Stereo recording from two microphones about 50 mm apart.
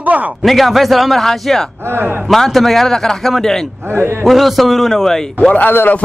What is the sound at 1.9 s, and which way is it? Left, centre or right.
Speech, right.